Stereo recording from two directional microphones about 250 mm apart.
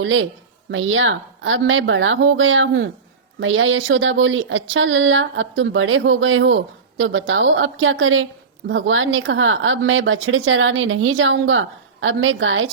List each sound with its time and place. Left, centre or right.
0.0 s speech: right